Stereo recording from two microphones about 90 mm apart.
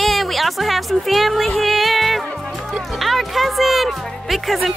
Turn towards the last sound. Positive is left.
turn(degrees=0)  # may be behind; listen again after turning